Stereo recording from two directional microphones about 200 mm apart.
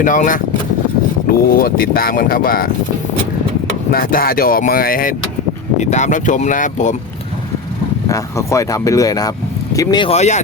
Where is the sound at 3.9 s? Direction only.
45° left (ahead or behind).